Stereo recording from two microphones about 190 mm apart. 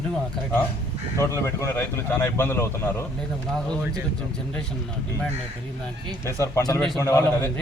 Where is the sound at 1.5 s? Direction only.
15° left (ahead or behind).